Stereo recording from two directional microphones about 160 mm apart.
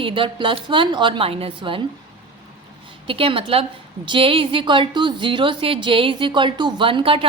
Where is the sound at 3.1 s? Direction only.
35° right (ahead or behind).